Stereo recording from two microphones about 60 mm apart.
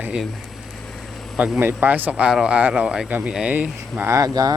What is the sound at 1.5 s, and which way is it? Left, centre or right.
Speech, right.